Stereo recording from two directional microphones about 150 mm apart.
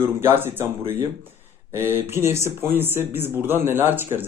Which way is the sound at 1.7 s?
15° right (ahead or behind).